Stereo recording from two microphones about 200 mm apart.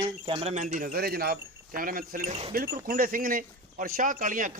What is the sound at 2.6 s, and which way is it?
Speech, 50° right (ahead or behind).